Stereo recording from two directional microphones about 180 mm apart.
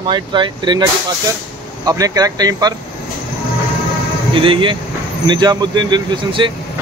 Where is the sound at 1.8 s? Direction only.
20° right (ahead or behind).